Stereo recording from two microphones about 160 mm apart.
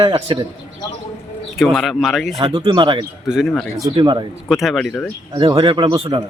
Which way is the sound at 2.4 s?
35° right (ahead or behind).